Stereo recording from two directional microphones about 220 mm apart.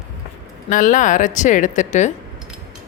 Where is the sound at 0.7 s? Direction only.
35° left (ahead or behind).